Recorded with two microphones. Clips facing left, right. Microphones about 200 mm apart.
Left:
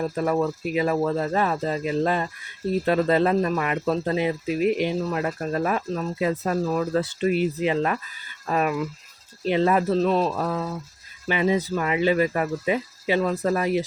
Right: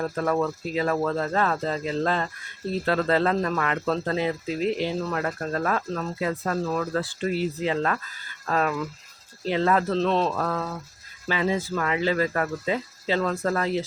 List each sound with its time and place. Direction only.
0.0 s speech: 15° left (ahead or behind)